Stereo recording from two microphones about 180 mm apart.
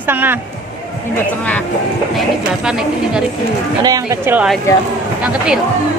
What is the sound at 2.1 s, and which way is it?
Speech, 5° right (ahead or behind).